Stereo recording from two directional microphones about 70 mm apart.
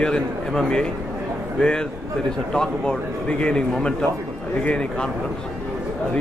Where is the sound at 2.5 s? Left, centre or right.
Centre.